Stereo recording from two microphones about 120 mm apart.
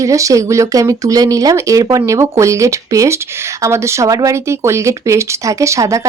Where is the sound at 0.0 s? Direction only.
25° right (ahead or behind).